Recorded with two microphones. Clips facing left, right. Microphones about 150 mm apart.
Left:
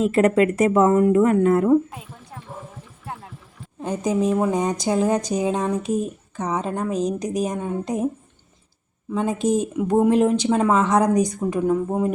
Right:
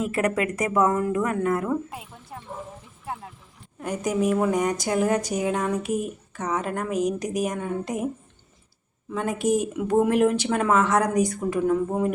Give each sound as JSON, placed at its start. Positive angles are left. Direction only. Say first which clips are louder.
{"t": 0.0, "sound": "speech", "louder": "left 7 dB", "side_deg": 25}
{"t": 3.8, "sound": "speech", "louder": "left 3 dB", "side_deg": 25}
{"t": 9.1, "sound": "speech", "louder": "left 2 dB", "side_deg": 20}